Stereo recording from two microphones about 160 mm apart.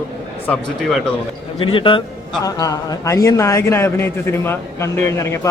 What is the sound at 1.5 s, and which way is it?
Speech, 30° left (ahead or behind).